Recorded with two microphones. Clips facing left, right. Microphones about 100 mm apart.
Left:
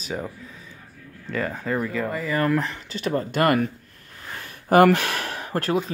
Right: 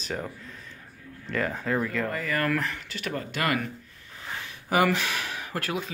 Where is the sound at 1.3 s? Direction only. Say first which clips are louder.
Left 1 dB; centre (ahead or behind); by 3.2 s 30° left (ahead or behind).